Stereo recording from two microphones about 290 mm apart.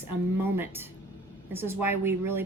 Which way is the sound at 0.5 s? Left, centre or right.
Centre.